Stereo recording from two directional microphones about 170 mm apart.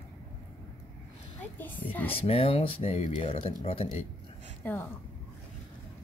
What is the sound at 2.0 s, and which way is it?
Speech, 35° left (ahead or behind).